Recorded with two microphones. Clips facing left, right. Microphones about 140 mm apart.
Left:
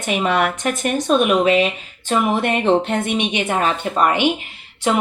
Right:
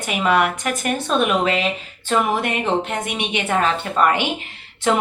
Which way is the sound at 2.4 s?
30° left (ahead or behind).